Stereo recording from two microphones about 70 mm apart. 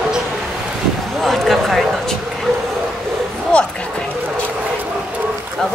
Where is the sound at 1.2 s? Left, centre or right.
Centre.